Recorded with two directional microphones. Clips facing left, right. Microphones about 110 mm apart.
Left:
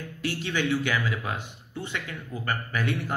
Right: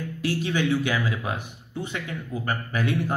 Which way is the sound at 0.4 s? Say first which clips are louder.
Right 2 dB; 15° right (ahead or behind).